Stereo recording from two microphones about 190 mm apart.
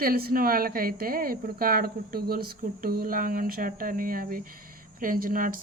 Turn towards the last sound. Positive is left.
turn(degrees=-45)  # may be behind; listen again after turning